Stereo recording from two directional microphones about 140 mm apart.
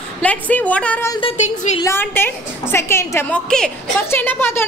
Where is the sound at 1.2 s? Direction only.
40° left (ahead or behind).